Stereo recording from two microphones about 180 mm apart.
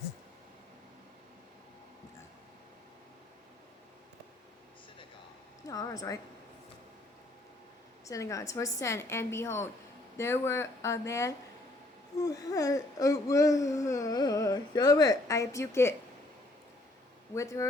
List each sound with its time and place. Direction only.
5.6 s speech: 20° left (ahead or behind)
8.0 s speech: 15° left (ahead or behind)
17.3 s speech: 15° left (ahead or behind)